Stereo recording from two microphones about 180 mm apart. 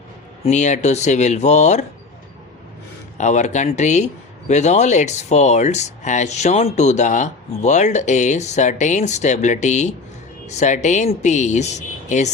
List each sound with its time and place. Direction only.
0.4 s speech: 40° left (ahead or behind)
3.2 s speech: 40° left (ahead or behind)